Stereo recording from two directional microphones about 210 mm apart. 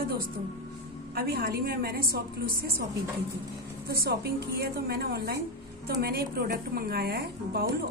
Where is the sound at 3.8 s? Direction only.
50° right (ahead or behind).